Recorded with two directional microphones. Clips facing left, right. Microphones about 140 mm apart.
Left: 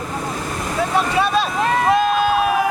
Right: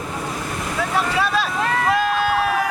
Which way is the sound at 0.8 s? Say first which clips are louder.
Left 3 dB; 25° left (ahead or behind).